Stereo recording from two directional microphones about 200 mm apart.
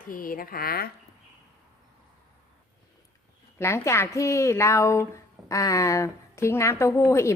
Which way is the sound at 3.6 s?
15° left (ahead or behind).